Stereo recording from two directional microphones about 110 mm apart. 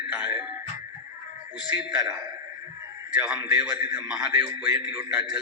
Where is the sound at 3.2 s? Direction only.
10° right (ahead or behind).